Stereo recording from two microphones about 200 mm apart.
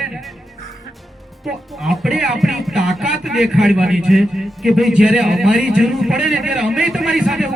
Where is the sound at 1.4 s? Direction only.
Centre (ahead or behind).